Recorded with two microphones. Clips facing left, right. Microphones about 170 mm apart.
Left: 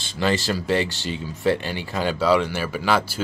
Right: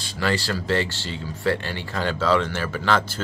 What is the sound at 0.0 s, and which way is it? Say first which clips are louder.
Speech: left 2 dB; 20° left (ahead or behind).